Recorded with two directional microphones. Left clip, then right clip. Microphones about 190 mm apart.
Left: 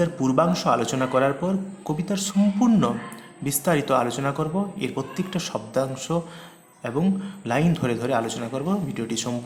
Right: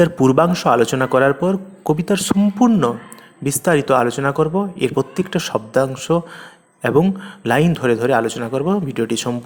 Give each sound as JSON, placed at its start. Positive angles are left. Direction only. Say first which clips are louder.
{"t": 0.0, "sound": "speech", "louder": "right 8 dB", "side_deg": -40}